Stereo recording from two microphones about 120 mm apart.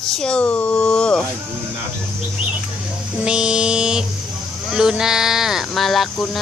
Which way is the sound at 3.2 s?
5° right (ahead or behind).